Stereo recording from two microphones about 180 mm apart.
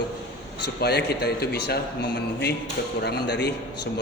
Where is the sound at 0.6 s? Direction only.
65° left (ahead or behind).